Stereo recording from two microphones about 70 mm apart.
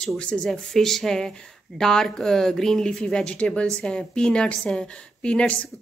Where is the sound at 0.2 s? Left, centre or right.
Centre.